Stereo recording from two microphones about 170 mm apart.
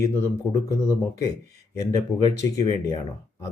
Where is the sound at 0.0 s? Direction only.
15° left (ahead or behind).